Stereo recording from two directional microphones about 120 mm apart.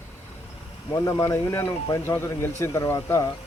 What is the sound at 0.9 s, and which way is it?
Speech, 30° left (ahead or behind).